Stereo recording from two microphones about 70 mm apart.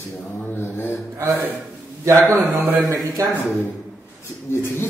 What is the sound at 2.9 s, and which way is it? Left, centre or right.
Speech, right.